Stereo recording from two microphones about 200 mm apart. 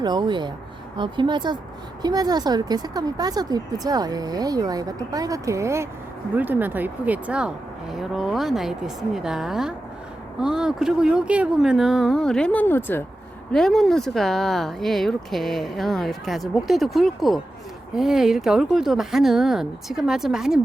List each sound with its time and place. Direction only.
0.0 s a woman's voice: 20° right (ahead or behind); by 20.6 s 5° right (ahead or behind)